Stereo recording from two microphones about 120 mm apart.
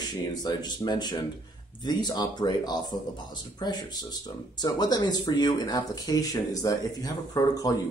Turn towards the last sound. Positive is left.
turn(degrees=30)  # may be behind; listen again after turning